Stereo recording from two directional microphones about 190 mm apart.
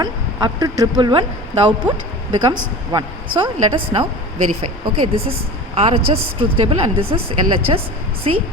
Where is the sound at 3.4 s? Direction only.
25° right (ahead or behind).